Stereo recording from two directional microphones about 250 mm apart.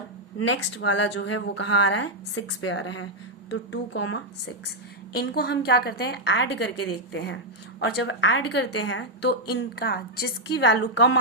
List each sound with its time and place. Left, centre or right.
0.3 s a woman's voice: left
5.1 s a woman's voice: left